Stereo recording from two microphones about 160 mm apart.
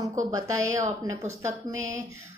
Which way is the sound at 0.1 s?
20° right (ahead or behind).